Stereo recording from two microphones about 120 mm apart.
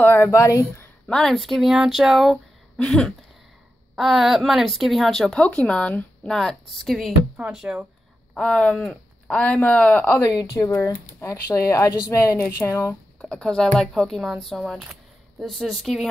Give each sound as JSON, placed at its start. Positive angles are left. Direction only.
{"t": 0.0, "sound": "speech", "side_deg": 15}
{"t": 1.0, "sound": "a woman's voice", "side_deg": 5}
{"t": 8.4, "sound": "speech", "side_deg": 5}
{"t": 10.3, "sound": "speech", "side_deg": 30}
{"t": 13.2, "sound": "a woman's voice", "side_deg": 5}